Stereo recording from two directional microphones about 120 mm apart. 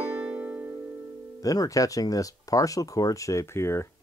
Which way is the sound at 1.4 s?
30° left (ahead or behind).